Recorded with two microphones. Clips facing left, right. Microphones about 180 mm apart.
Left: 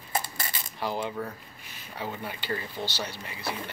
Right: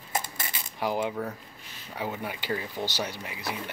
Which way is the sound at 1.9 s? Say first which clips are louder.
Right 2 dB; 15° right (ahead or behind).